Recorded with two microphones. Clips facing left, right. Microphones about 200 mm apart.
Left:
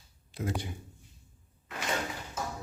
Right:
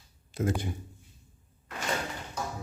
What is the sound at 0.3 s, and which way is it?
Speech, 45° right (ahead or behind).